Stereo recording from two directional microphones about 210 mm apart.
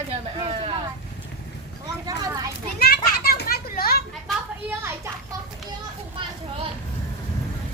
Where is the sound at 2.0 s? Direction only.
20° right (ahead or behind).